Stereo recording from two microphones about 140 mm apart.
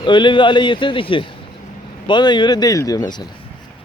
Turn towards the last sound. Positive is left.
turn(degrees=25)  # may be behind; listen again after turning